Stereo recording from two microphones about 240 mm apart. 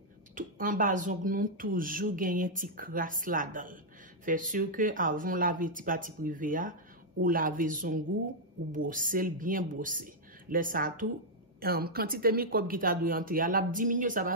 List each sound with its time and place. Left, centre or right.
0.3 s speech: right